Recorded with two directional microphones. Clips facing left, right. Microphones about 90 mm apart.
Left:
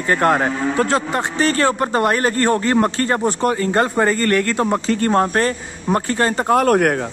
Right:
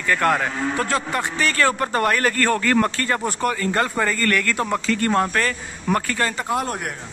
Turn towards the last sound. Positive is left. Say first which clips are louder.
# left 11 dB
turn(degrees=65)  # may be behind; listen again after turning